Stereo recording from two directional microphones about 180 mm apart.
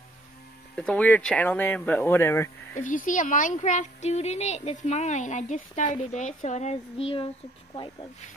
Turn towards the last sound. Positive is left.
turn(degrees=30)  # may be behind; listen again after turning